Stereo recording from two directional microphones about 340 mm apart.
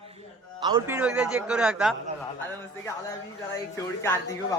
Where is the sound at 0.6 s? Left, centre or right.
Centre.